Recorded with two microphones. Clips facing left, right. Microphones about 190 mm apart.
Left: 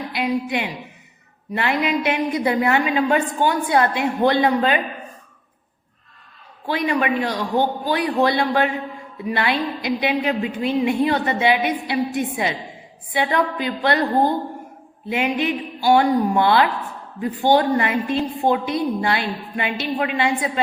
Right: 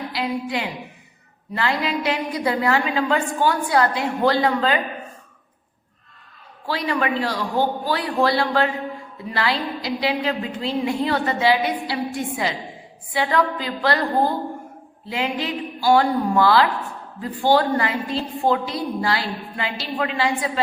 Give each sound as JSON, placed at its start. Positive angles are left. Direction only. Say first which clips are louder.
{"t": 0.1, "sound": "a sound", "louder": "left 4 dB", "side_deg": 20}
{"t": 1.5, "sound": "a woman's voice", "louder": "left 2 dB", "side_deg": 20}
{"t": 6.7, "sound": "a woman's voice", "louder": "left 2 dB", "side_deg": 20}